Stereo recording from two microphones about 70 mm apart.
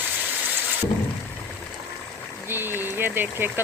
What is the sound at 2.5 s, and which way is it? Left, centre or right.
Speech, right.